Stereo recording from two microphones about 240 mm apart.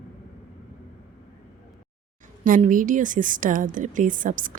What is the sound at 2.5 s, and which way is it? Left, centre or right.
A woman's voice, right.